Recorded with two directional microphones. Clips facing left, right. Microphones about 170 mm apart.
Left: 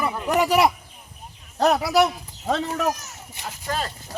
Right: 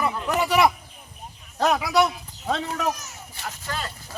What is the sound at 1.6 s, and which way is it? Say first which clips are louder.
Speech: left 2 dB; 40° left (ahead or behind).